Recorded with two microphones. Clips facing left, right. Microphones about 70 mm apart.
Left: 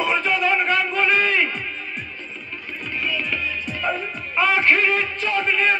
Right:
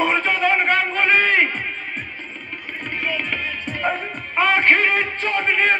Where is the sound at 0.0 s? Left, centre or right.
Right.